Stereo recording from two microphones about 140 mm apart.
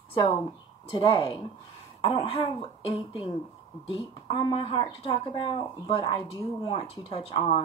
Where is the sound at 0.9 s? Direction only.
35° left (ahead or behind).